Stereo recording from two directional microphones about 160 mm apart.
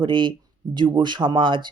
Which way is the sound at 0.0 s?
30° right (ahead or behind).